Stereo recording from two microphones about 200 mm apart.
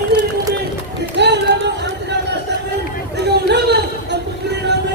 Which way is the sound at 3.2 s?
60° right (ahead or behind).